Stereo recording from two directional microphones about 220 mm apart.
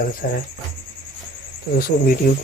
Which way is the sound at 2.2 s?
40° left (ahead or behind).